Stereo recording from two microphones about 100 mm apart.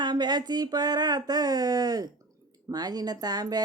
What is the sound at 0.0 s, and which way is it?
Speech, 45° right (ahead or behind).